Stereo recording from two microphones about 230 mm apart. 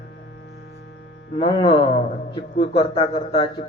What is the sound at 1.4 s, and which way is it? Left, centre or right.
Speech, left.